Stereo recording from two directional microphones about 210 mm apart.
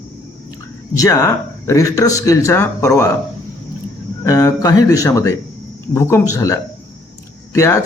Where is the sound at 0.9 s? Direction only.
15° left (ahead or behind).